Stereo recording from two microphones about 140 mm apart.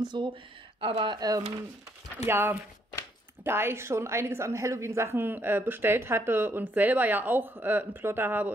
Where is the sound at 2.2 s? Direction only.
15° right (ahead or behind).